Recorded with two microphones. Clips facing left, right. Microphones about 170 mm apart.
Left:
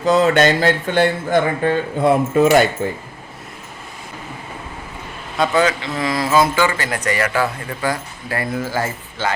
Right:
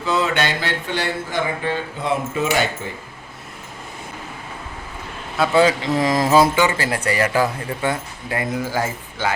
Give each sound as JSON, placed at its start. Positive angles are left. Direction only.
{"t": 0.0, "sound": "speech", "side_deg": 40}
{"t": 5.5, "sound": "speech", "side_deg": -35}
{"t": 6.6, "sound": "speech", "side_deg": -25}